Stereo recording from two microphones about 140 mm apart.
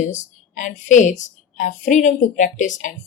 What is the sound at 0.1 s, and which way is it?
Speech, 60° left (ahead or behind).